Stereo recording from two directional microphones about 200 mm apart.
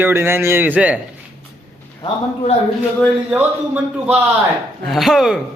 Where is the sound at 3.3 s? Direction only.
10° right (ahead or behind).